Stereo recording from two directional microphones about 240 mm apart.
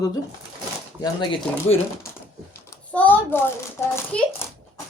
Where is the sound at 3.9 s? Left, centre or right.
Centre.